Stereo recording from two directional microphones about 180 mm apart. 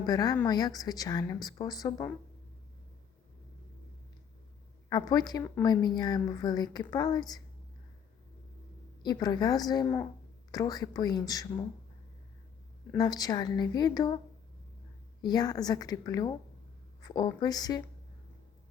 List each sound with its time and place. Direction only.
0.0 s a woman's voice: 20° left (ahead or behind)
4.9 s a woman's voice: 20° left (ahead or behind)
9.0 s a woman's voice: 20° left (ahead or behind)
13.0 s a woman's voice: 20° left (ahead or behind)
15.2 s a woman's voice: 20° left (ahead or behind)